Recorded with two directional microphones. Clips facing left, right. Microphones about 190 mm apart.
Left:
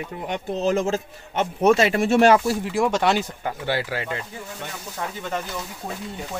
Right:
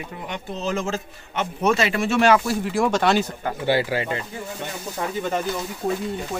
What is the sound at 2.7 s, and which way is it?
Speech, 15° left (ahead or behind).